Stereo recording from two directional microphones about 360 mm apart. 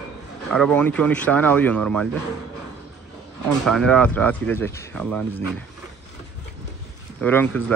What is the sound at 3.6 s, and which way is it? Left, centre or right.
Speech, centre.